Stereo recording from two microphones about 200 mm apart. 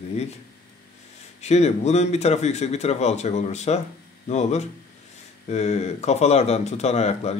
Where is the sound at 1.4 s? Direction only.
35° left (ahead or behind).